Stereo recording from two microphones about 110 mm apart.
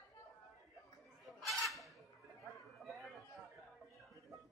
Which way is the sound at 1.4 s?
Centre (ahead or behind).